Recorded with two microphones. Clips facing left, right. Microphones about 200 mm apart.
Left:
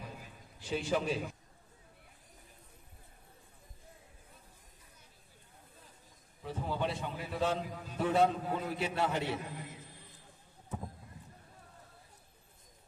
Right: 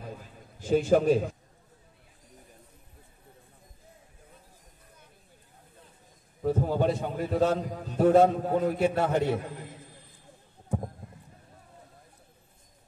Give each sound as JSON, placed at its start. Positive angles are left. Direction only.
{"t": 0.6, "sound": "a man's voice", "side_deg": -45}
{"t": 6.4, "sound": "a man's voice", "side_deg": -45}
{"t": 10.7, "sound": "clip-clop", "side_deg": -50}